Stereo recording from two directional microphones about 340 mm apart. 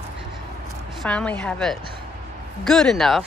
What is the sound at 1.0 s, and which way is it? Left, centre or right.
Speech, centre.